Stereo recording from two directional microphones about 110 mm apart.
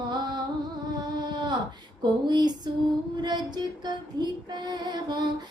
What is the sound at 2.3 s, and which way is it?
Female singing, 40° right (ahead or behind).